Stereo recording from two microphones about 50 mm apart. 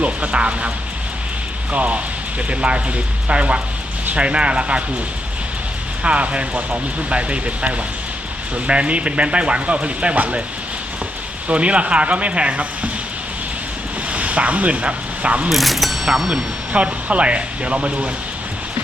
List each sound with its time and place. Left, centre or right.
0.0 s speech: right
1.7 s speech: right
6.0 s speech: right
11.4 s speech: right
14.1 s speech: right
15.4 s speech: centre
16.7 s speech: right